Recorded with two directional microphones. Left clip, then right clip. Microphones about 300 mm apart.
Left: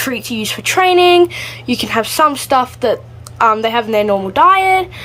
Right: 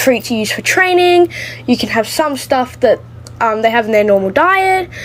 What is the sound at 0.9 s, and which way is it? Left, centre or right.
Speech, left.